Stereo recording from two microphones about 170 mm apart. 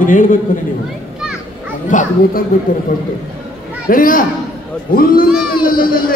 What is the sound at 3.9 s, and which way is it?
Speech, 55° left (ahead or behind).